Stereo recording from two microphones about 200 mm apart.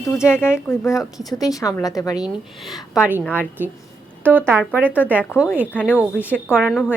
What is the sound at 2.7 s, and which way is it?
Speech, 5° right (ahead or behind).